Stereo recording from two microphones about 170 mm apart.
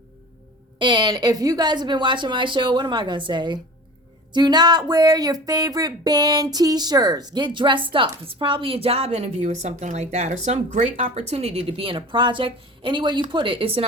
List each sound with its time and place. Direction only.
0.8 s a woman's voice: 25° right (ahead or behind)